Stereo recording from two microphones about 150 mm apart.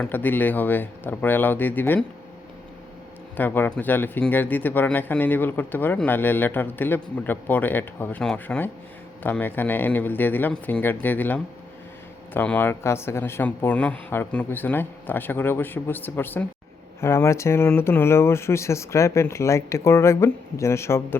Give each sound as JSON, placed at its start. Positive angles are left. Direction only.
{"t": 0.0, "sound": "speech", "side_deg": 10}
{"t": 3.3, "sound": "speech", "side_deg": 15}